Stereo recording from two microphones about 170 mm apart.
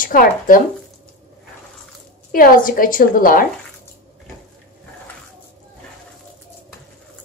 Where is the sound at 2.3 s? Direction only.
55° left (ahead or behind).